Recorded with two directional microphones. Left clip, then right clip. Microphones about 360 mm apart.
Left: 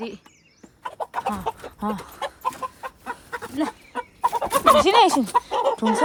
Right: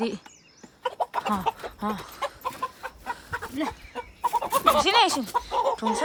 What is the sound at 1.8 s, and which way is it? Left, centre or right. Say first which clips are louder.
Chicken: left 2 dB; centre.